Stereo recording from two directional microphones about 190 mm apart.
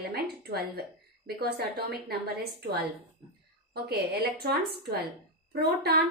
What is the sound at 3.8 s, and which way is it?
A woman's voice, 55° right (ahead or behind).